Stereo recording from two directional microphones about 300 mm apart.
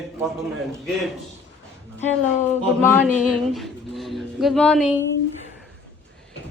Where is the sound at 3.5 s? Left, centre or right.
Centre.